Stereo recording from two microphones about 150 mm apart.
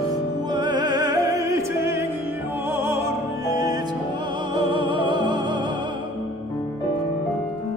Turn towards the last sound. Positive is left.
turn(degrees=-30)  # may be behind; listen again after turning